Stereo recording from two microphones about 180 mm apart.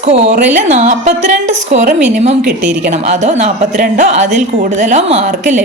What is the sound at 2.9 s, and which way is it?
A woman's voice, 40° right (ahead or behind).